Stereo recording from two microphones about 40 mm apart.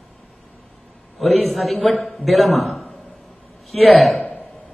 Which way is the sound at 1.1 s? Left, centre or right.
Centre.